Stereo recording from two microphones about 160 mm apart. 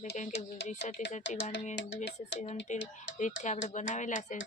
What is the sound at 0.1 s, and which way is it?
Speech, 50° left (ahead or behind).